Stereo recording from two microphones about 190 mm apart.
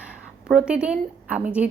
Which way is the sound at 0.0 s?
5° right (ahead or behind).